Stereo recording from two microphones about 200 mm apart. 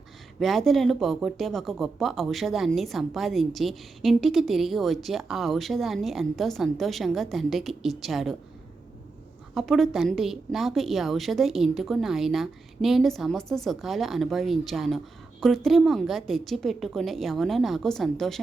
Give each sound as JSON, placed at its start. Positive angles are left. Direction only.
{"t": 0.3, "sound": "a woman's voice", "side_deg": 0}
{"t": 9.6, "sound": "a woman's voice", "side_deg": 0}